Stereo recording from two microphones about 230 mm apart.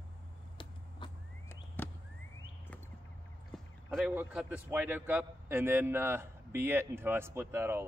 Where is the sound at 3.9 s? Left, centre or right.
Centre.